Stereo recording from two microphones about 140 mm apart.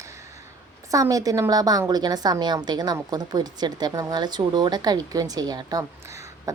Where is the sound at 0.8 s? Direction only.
25° right (ahead or behind).